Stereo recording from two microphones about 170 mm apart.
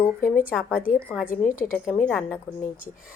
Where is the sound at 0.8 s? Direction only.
55° left (ahead or behind).